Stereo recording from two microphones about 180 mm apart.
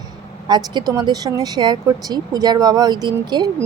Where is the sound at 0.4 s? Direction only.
25° right (ahead or behind).